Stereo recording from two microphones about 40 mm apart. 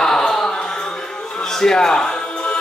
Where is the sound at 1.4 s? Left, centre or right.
Centre.